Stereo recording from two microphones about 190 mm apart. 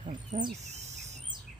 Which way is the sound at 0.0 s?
40° right (ahead or behind).